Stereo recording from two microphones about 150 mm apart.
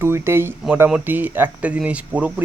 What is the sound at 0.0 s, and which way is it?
Speech, 15° right (ahead or behind).